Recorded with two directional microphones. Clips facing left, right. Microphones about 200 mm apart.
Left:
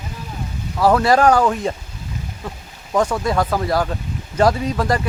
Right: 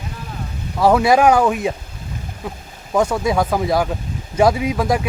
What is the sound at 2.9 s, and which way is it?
Speech, 10° right (ahead or behind).